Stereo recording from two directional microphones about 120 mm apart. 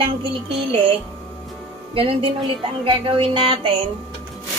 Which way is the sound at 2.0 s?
50° right (ahead or behind).